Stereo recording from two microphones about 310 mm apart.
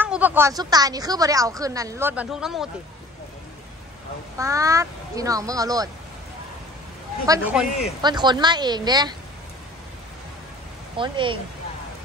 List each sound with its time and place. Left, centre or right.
0.0 s speech: centre
4.4 s speech: centre
7.2 s a man's voice: centre
11.0 s speech: centre